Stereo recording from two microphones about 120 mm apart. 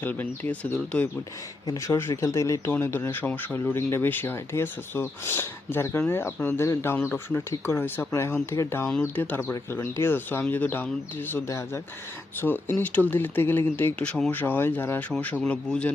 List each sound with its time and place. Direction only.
0.0 s speech: 15° left (ahead or behind)
1.6 s speech: 25° left (ahead or behind); by 15.9 s 10° left (ahead or behind)